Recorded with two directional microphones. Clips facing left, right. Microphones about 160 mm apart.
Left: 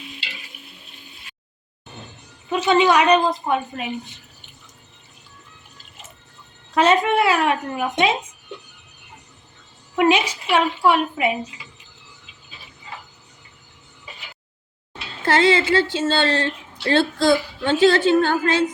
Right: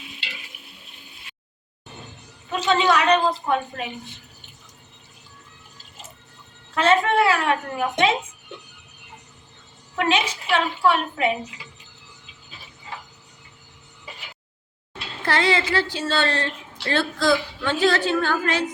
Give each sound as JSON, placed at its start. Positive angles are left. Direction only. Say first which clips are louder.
{"t": 2.5, "sound": "a woman's voice", "louder": "left 3 dB", "side_deg": 10}
{"t": 6.7, "sound": "a woman's voice", "louder": "left 2 dB", "side_deg": 15}
{"t": 9.9, "sound": "a woman's voice", "louder": "left 5 dB", "side_deg": 15}
{"t": 15.2, "sound": "a woman's voice", "louder": "left 5 dB", "side_deg": 25}